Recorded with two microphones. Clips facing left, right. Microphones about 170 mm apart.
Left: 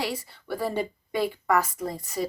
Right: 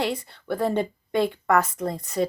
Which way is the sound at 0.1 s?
10° left (ahead or behind).